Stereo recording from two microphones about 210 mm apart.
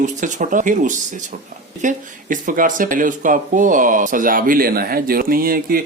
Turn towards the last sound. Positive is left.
turn(degrees=-45)  # may be behind; listen again after turning